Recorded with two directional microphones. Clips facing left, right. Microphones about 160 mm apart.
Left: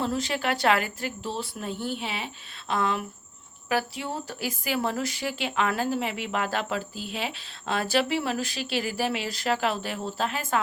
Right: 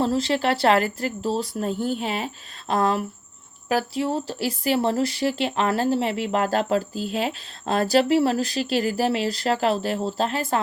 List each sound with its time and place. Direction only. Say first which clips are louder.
0.0 s speech: right 6 dB; 35° right (ahead or behind)